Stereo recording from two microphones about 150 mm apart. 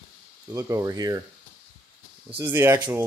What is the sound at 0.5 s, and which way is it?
Speech, 20° right (ahead or behind).